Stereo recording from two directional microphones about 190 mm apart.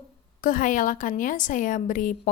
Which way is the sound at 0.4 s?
45° left (ahead or behind).